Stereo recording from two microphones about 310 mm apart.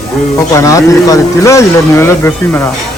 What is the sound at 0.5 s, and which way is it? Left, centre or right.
Speech, centre.